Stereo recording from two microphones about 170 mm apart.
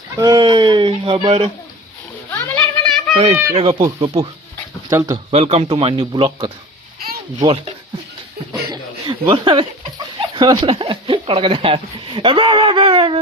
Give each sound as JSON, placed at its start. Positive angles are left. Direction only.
{"t": 0.2, "sound": "speech", "side_deg": -25}
{"t": 2.3, "sound": "a sound", "side_deg": 10}
{"t": 3.5, "sound": "speech", "side_deg": -30}
{"t": 4.9, "sound": "speech", "side_deg": -15}
{"t": 5.3, "sound": "a man's voice", "side_deg": -40}
{"t": 8.7, "sound": "a sound", "side_deg": -30}
{"t": 10.2, "sound": "speech", "side_deg": -30}